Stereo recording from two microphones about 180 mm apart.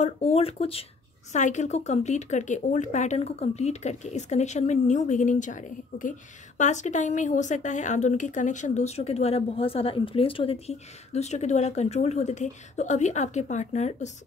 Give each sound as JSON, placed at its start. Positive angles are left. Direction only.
{"t": 0.0, "sound": "a woman's voice", "side_deg": 35}
{"t": 1.3, "sound": "a woman's voice", "side_deg": 45}